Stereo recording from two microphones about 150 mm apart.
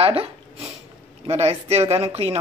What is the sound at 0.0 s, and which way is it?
Speech, 40° right (ahead or behind).